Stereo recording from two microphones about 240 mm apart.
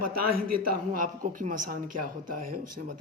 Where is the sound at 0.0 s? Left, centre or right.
Right.